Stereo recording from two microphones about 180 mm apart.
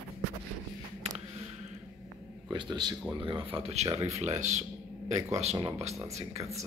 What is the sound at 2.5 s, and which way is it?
Speech, 25° right (ahead or behind).